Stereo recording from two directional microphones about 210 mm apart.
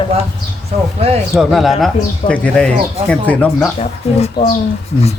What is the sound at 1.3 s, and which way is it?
Speech, centre (ahead or behind).